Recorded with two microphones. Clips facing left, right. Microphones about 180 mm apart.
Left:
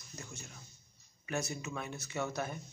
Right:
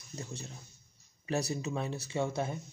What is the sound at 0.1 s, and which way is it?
Speech, 30° right (ahead or behind).